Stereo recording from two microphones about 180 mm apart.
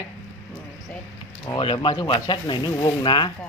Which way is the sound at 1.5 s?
30° left (ahead or behind).